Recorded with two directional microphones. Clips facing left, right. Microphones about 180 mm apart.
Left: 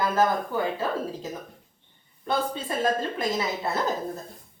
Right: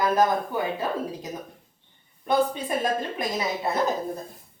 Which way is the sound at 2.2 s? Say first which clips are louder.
Right 4 dB; 15° right (ahead or behind).